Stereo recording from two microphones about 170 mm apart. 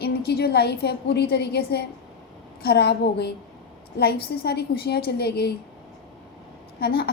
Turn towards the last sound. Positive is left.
turn(degrees=70)  # may be behind; listen again after turning